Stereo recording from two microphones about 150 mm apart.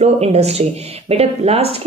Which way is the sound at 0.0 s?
45° right (ahead or behind).